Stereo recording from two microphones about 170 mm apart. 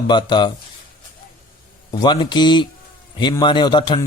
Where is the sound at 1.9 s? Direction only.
25° left (ahead or behind).